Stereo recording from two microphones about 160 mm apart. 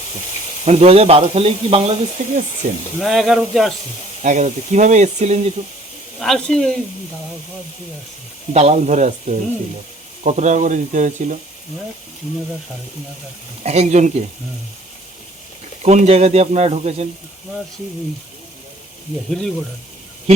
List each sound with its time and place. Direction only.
0.6 s speech: 40° right (ahead or behind)
3.0 s speech: centre (ahead or behind)
4.2 s speech: 50° right (ahead or behind)
6.1 s speech: centre (ahead or behind)
8.5 s speech: 45° right (ahead or behind)
13.6 s speech: 45° right (ahead or behind)
15.8 s speech: 45° right (ahead or behind)